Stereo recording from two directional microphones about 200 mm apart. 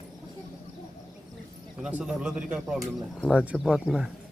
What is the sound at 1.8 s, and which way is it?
A man's voice, 5° right (ahead or behind).